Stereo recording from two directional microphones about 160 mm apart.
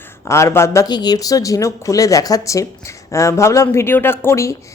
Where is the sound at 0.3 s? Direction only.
20° left (ahead or behind).